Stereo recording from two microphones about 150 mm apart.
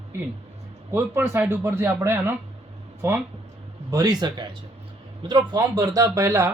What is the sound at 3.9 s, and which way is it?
Speech, 25° right (ahead or behind).